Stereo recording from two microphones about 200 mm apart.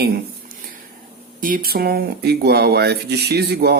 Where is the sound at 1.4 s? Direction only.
45° right (ahead or behind).